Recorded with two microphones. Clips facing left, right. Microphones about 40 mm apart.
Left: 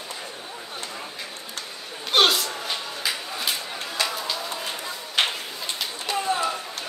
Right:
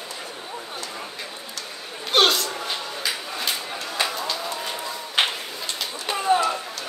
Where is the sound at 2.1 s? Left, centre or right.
Centre.